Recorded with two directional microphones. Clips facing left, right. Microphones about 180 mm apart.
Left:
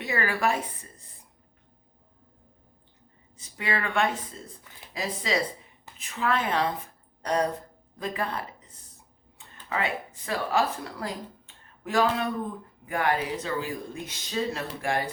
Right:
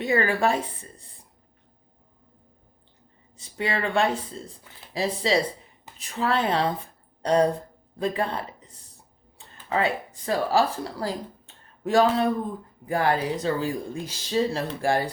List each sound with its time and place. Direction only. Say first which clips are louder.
0.0 s speech: right 5 dB; 30° right (ahead or behind)
3.3 s speech: right 3 dB; 30° right (ahead or behind)